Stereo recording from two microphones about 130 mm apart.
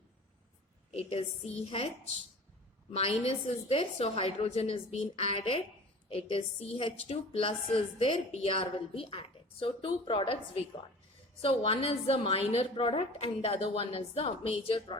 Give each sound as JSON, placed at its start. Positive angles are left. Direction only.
{"t": 0.9, "sound": "a woman's voice", "side_deg": 55}
{"t": 2.9, "sound": "a woman's voice", "side_deg": 45}